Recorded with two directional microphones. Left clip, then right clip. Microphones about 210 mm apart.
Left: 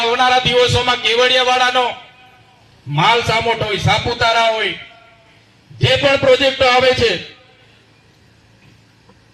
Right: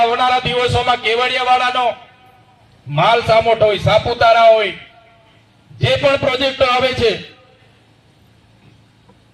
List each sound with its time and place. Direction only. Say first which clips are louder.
0.0 s a man's voice: even; 45° right (ahead or behind)
2.9 s a man's voice: right 2 dB; 50° right (ahead or behind)
5.8 s a man's voice: left 1 dB; 50° right (ahead or behind)